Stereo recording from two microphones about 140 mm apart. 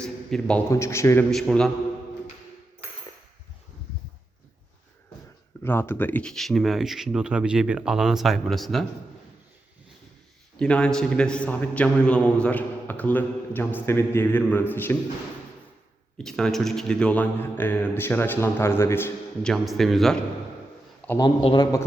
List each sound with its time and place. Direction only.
0.0 s a sound: 5° left (ahead or behind)
0.7 s a man's voice: 20° left (ahead or behind)
1.3 s speech: centre (ahead or behind)
5.6 s speech: 15° left (ahead or behind)
10.6 s a man's voice: 5° left (ahead or behind)
16.1 s a man's voice: 5° left (ahead or behind)
19.4 s speech: centre (ahead or behind)
21.2 s a man's voice: 30° left (ahead or behind)